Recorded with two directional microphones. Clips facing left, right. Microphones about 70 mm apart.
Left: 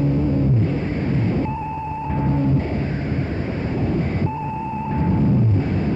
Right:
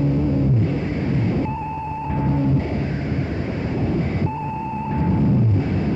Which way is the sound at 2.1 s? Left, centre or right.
Left.